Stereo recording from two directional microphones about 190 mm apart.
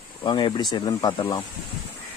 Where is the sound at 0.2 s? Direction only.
25° left (ahead or behind).